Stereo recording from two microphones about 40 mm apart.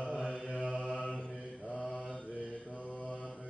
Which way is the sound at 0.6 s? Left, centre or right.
Left.